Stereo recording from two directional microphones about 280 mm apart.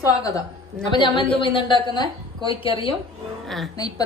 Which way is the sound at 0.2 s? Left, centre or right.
Centre.